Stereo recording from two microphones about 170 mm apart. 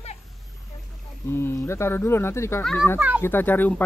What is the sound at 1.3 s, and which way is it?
Speech, 15° left (ahead or behind).